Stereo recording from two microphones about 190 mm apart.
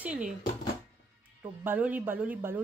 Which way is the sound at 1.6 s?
10° right (ahead or behind).